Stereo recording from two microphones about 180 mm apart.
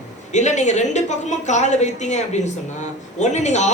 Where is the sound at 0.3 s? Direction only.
40° left (ahead or behind).